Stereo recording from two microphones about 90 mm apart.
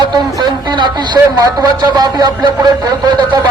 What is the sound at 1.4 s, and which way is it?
Speech, 45° right (ahead or behind).